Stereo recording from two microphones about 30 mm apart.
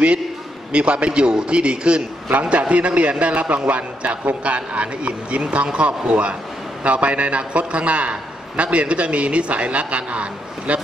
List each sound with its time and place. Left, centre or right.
0.7 s a man's voice: right